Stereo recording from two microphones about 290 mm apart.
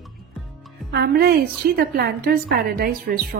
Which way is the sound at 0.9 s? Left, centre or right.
Right.